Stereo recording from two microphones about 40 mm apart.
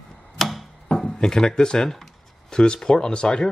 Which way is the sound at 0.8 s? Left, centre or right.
Centre.